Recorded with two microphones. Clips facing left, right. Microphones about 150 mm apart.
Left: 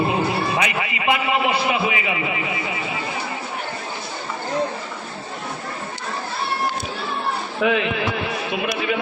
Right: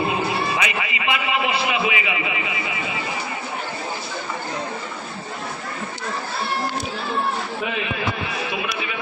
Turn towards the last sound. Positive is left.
turn(degrees=75)  # may be behind; listen again after turning